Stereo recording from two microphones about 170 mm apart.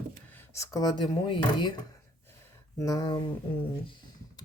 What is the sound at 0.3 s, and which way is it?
Speech, 15° left (ahead or behind).